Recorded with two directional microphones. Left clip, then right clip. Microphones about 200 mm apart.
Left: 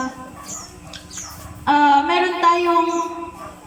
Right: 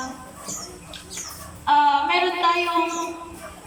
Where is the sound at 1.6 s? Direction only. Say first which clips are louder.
Left 3 dB; 35° left (ahead or behind).